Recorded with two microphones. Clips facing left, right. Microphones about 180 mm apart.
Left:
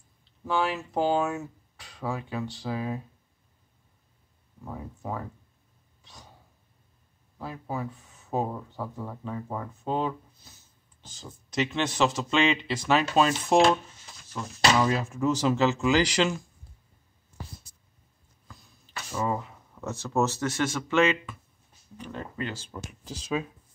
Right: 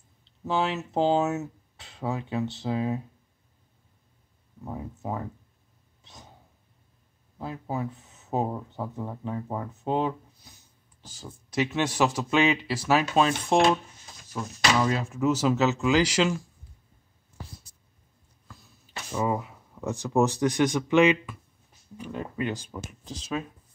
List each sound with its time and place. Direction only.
0.5 s speech: 25° right (ahead or behind)
4.6 s speech: 20° right (ahead or behind)
7.3 s a man's voice: 20° right (ahead or behind); by 16.4 s centre (ahead or behind)
18.9 s a man's voice: 15° right (ahead or behind)
22.8 s speech: 5° left (ahead or behind)